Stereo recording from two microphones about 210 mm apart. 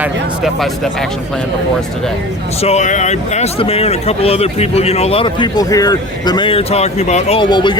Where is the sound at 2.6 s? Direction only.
35° left (ahead or behind).